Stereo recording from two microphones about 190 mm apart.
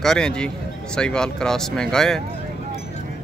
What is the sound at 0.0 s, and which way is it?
Speech, 5° left (ahead or behind).